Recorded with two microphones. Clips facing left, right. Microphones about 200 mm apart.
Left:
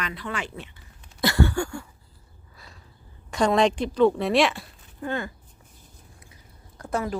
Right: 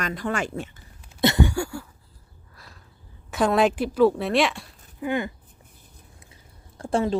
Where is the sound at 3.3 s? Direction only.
5° right (ahead or behind).